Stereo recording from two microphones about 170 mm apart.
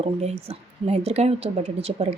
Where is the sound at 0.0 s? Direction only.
35° right (ahead or behind).